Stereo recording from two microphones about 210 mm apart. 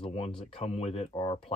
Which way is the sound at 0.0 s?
30° left (ahead or behind).